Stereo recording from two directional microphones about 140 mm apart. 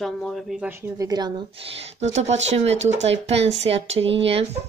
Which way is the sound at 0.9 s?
25° right (ahead or behind).